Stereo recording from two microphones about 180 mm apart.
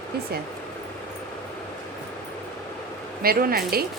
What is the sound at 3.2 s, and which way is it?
Speech, 55° right (ahead or behind).